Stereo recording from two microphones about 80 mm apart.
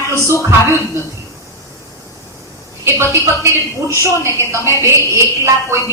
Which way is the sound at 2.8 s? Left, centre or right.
Right.